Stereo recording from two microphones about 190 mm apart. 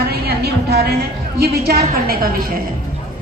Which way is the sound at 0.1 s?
55° right (ahead or behind).